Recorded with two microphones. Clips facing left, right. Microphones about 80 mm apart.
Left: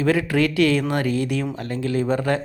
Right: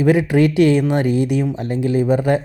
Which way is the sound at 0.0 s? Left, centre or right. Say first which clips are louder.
Right 5 dB; centre.